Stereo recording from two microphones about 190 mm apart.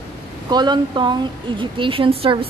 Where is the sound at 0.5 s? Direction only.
25° right (ahead or behind).